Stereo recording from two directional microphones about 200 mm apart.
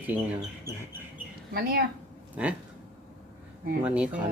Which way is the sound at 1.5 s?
50° right (ahead or behind).